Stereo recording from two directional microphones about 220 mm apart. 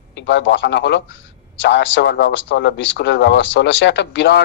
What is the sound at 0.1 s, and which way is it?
Speech, 55° left (ahead or behind).